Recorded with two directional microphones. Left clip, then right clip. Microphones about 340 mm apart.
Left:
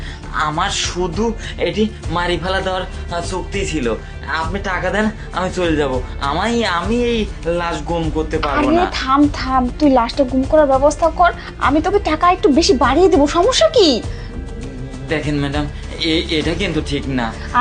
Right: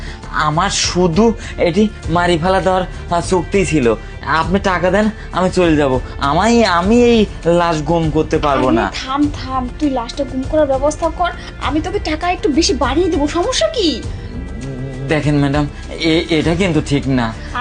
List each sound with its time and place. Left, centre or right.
0.3 s speech: right
8.9 s a woman's voice: left
15.1 s speech: right